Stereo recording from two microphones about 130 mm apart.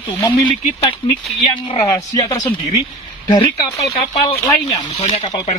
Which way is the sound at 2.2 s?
25° left (ahead or behind).